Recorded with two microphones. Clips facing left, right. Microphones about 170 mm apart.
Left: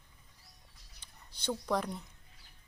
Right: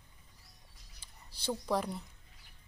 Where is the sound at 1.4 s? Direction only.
5° right (ahead or behind).